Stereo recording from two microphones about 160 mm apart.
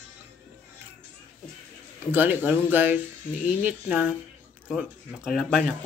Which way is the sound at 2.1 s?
10° right (ahead or behind).